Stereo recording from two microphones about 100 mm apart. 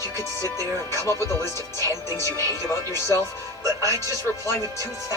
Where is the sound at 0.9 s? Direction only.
25° left (ahead or behind).